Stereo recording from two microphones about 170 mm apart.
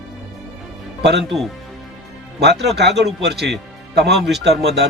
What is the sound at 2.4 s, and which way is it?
Speech, 80° right.